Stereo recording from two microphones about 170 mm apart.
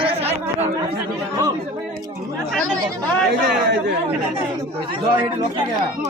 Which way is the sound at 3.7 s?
90° right.